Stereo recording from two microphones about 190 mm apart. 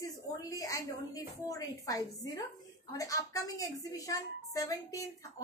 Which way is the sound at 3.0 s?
15° left (ahead or behind).